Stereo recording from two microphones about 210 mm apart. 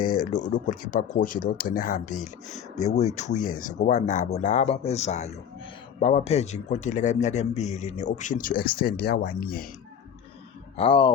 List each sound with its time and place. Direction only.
0.2 s a man's voice: 35° left (ahead or behind)
10.8 s speech: 25° left (ahead or behind)